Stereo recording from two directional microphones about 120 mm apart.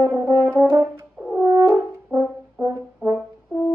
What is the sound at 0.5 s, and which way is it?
French horn, 15° right (ahead or behind).